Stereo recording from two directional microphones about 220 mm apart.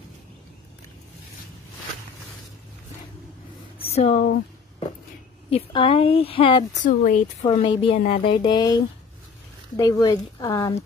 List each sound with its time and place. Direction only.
3.7 s a sound: 30° left (ahead or behind)
5.5 s speech: 25° left (ahead or behind)
6.8 s speech: 35° left (ahead or behind)
7.4 s speech: 25° left (ahead or behind)